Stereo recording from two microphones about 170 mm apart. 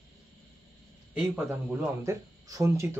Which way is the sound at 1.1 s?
10° right (ahead or behind).